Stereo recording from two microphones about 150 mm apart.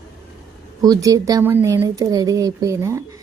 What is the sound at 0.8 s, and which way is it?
Speech, 25° right (ahead or behind).